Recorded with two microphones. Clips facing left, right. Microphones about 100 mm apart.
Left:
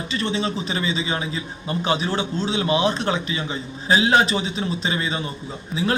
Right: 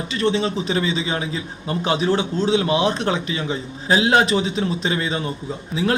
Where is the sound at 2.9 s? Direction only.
55° right (ahead or behind).